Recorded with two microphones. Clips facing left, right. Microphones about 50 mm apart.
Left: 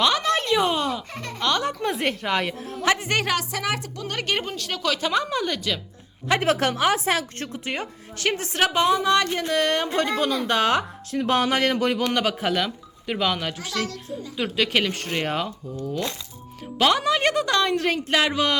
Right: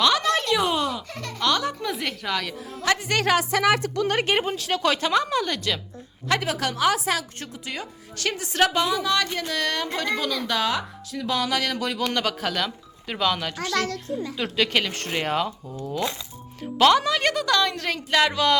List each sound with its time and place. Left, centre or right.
0.0 s a sound: centre
1.1 s a woman's voice: left
3.5 s a woman's voice: right
4.3 s speech: centre
4.9 s speech: centre
6.4 s a woman's voice: left
12.1 s speech: centre
15.6 s speech: centre
16.7 s a woman's voice: centre